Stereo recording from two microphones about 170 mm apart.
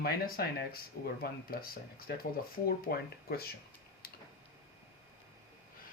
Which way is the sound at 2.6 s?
65° left (ahead or behind).